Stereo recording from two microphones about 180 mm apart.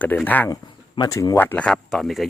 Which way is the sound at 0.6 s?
20° left (ahead or behind).